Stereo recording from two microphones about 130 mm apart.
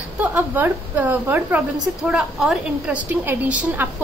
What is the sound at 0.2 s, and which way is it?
A woman's voice, 15° right (ahead or behind).